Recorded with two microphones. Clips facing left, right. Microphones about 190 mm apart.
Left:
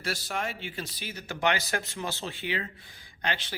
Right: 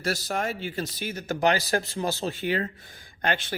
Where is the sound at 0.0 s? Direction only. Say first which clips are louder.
Right 5 dB; 40° right (ahead or behind).